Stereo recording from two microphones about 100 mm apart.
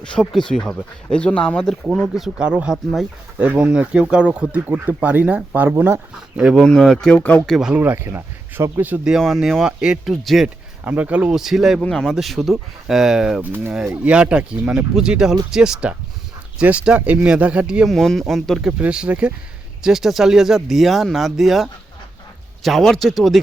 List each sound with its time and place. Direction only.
0.0 s speech: 5° left (ahead or behind)
2.0 s speech: centre (ahead or behind)
3.3 s speech: 20° right (ahead or behind)
6.4 s speech: centre (ahead or behind)
7.4 s speech: 5° right (ahead or behind)
7.8 s speech: 20° right (ahead or behind)
9.0 s speech: centre (ahead or behind)
10.8 s speech: 15° right (ahead or behind)
13.4 s speech: 20° right (ahead or behind)
17.8 s speech: 5° left (ahead or behind)
18.8 s speech: 10° right (ahead or behind)